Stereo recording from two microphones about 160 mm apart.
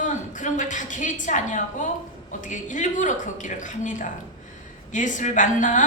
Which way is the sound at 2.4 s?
50° left (ahead or behind).